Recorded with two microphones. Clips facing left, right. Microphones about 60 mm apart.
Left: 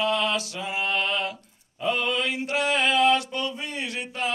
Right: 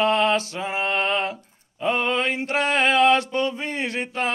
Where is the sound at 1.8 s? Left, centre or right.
Right.